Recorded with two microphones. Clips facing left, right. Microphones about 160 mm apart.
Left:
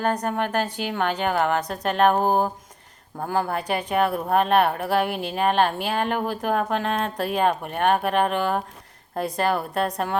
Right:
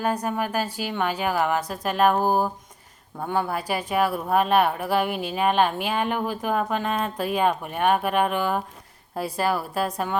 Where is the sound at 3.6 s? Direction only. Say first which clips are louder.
Left 1 dB; 5° right (ahead or behind).